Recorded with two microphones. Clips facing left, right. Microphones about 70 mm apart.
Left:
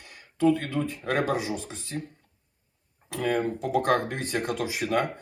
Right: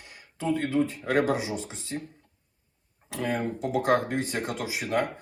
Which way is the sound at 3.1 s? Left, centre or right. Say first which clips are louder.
Left 3 dB; centre.